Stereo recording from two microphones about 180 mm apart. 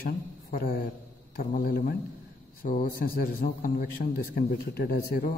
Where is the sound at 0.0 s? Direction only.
50° left (ahead or behind).